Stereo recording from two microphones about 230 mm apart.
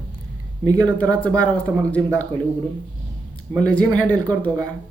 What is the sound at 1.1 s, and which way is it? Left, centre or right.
Speech, centre.